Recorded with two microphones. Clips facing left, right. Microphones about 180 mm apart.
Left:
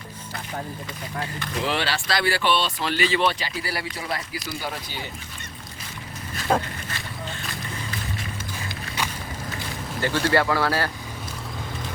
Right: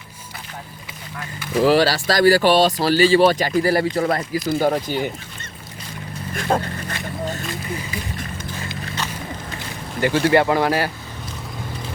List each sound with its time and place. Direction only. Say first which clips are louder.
1.6 s speech: right 11 dB; 40° right (ahead or behind)
6.5 s speech: right 2 dB; 10° right (ahead or behind)
9.0 s walk: even; 10° left (ahead or behind)
10.0 s speech: right 6 dB; 15° right (ahead or behind)